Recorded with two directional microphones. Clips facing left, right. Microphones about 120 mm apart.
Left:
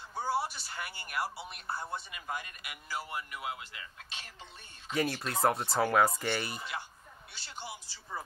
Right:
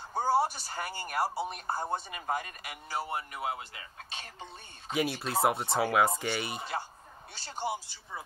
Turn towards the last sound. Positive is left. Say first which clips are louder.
# right 9 dB
turn(degrees=-45)  # may be behind; listen again after turning